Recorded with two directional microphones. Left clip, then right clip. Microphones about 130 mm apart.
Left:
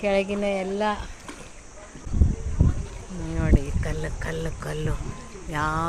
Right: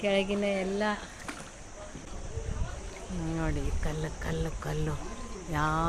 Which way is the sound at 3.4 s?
15° left (ahead or behind).